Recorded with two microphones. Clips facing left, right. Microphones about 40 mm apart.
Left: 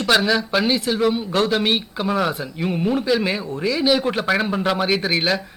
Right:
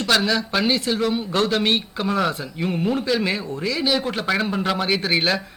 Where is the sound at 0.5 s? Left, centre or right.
Centre.